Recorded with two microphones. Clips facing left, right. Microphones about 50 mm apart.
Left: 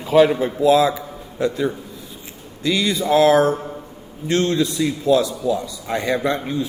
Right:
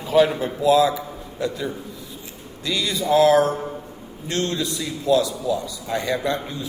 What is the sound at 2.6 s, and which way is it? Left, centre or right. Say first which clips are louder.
Speech: left 3 dB; left.